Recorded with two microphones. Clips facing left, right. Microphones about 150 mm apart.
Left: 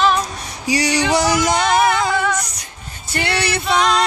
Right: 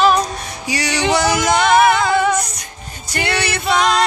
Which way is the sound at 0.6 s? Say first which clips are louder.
Left 2 dB; 35° left (ahead or behind).